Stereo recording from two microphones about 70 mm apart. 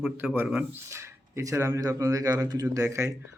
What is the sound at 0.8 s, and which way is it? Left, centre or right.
A man's voice, right.